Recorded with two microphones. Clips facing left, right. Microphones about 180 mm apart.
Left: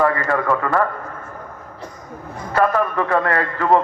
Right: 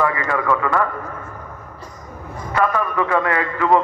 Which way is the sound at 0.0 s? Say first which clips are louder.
Left 2 dB; 45° left (ahead or behind).